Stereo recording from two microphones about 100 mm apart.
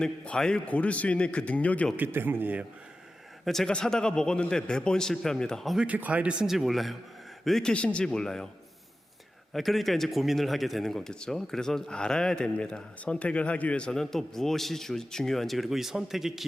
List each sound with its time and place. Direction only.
0.0 s a man's voice: 10° left (ahead or behind)
2.0 s speech: 20° right (ahead or behind)
3.4 s a man's voice: 5° left (ahead or behind)
5.8 s a man's voice: 15° right (ahead or behind); by 8.4 s 5° left (ahead or behind)
9.5 s a man's voice: centre (ahead or behind)